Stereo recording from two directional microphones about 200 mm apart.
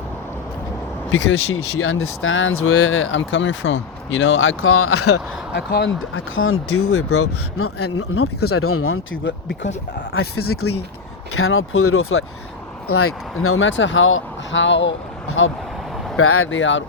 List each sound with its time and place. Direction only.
1.1 s speech: 70° left (ahead or behind); by 5.0 s 90° left
5.5 s speech: 60° left (ahead or behind); by 15.5 s 80° left
16.1 s speech: 90° left; by 16.8 s 70° left (ahead or behind)